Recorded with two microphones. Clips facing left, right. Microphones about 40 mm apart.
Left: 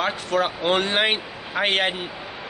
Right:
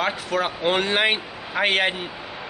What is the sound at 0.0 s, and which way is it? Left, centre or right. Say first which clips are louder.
Speech: left 1 dB; centre.